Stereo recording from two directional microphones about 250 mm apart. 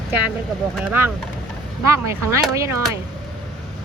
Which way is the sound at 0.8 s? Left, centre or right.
Centre.